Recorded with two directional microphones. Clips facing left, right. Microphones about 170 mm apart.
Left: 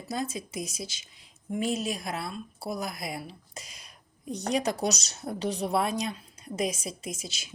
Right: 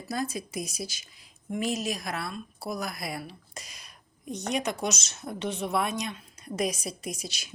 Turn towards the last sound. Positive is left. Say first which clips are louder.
# right 1 dB
turn(degrees=25)  # may be behind; listen again after turning